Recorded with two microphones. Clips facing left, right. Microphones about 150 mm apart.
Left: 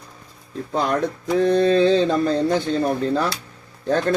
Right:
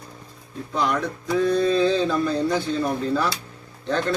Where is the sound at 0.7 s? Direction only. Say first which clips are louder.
Left 3 dB; 60° left (ahead or behind).